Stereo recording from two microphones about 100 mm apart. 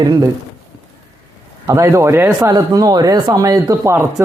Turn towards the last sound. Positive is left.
turn(degrees=-30)  # may be behind; listen again after turning